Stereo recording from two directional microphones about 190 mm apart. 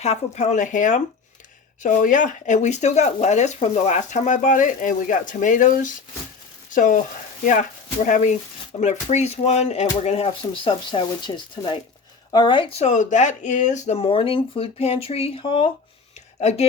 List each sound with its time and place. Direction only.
0.0 s speech: 35° left (ahead or behind)
8.0 s speech: 40° left (ahead or behind)